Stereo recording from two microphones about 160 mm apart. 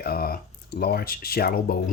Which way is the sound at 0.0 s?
70° left (ahead or behind).